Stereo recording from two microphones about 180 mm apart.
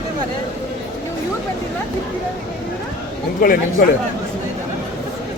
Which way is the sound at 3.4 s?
50° left (ahead or behind).